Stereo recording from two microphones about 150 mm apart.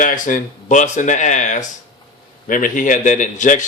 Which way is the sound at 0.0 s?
60° left (ahead or behind).